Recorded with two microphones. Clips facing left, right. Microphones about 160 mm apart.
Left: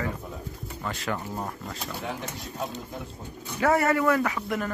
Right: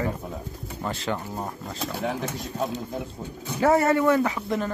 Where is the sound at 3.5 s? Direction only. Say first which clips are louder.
Right 3 dB; 25° right (ahead or behind).